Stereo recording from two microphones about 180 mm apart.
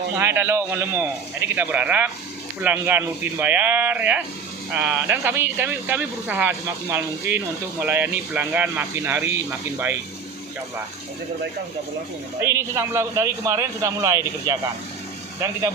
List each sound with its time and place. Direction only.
0.2 s speech: 15° right (ahead or behind)
12.4 s speech: 15° right (ahead or behind)